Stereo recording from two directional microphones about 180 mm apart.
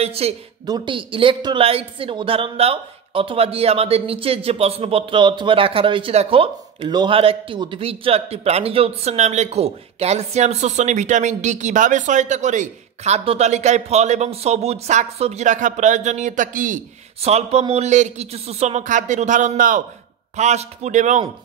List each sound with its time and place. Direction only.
0.0 s speech: 35° right (ahead or behind)
0.7 s speech: 25° right (ahead or behind); by 16.8 s 45° right (ahead or behind)
17.2 s speech: 35° right (ahead or behind)